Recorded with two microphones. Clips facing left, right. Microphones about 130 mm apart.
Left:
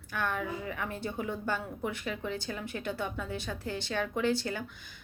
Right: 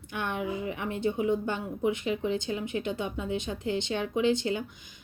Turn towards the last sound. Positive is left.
turn(degrees=-20)  # may be behind; listen again after turning